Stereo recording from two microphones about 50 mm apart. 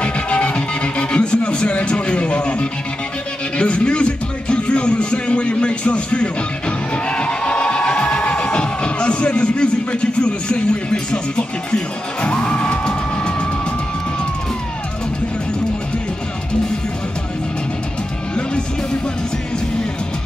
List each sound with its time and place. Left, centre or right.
0.0 s music: left